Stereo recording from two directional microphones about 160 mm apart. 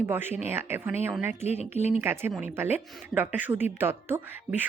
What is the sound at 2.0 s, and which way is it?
A woman's voice, 15° right (ahead or behind).